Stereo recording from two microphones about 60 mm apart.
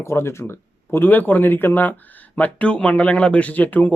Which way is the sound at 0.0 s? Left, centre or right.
Left.